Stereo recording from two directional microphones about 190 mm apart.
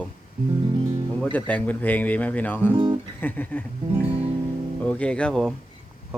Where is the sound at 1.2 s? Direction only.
10° left (ahead or behind).